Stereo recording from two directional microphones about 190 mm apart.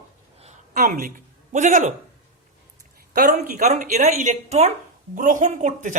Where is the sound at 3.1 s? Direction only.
45° right (ahead or behind).